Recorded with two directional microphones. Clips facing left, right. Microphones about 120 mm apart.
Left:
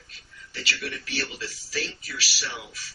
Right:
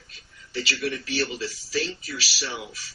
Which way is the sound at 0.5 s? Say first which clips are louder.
Right 6 dB; 25° right (ahead or behind).